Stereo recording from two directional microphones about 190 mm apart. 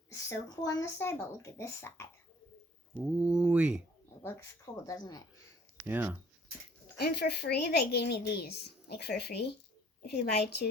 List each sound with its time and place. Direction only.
0.1 s speech: 15° left (ahead or behind)
3.0 s speech: 5° right (ahead or behind)
4.2 s speech: 15° left (ahead or behind)
5.8 s speech: 10° right (ahead or behind)
7.0 s speech: 60° left (ahead or behind)